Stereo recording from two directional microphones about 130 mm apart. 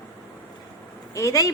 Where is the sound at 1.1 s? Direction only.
25° left (ahead or behind).